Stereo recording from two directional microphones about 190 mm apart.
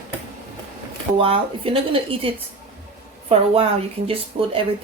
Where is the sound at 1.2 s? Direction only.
30° right (ahead or behind).